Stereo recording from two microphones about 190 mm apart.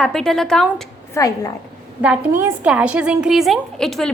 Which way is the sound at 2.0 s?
10° right (ahead or behind).